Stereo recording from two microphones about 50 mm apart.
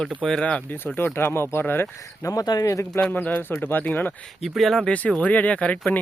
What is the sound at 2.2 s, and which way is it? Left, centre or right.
Speech, left.